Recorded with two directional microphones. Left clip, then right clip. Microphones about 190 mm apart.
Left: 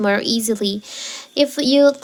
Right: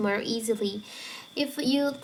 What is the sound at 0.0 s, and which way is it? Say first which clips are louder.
A woman's voice: left 10 dB; 40° left (ahead or behind).